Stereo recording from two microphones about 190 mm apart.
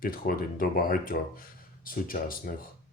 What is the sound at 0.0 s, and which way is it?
Speech, 50° left (ahead or behind).